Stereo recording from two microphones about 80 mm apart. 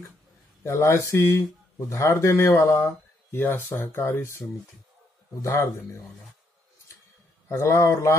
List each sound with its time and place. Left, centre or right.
0.7 s speech: left
7.5 s speech: left